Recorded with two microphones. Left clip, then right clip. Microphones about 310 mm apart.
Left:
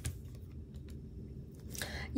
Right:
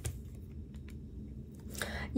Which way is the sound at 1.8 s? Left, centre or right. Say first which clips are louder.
Right 3 dB; centre.